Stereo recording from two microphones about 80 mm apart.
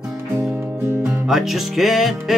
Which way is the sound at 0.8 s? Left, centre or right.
Right.